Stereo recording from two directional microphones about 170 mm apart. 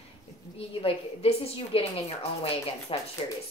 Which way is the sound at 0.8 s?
35° left (ahead or behind).